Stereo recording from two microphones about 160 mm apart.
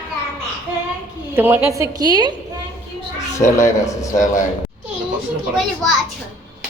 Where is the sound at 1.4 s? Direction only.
15° right (ahead or behind).